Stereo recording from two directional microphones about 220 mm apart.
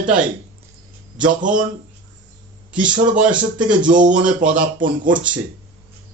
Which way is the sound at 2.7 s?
5° right (ahead or behind).